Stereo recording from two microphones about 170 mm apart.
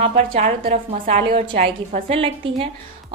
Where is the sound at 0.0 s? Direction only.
40° right (ahead or behind).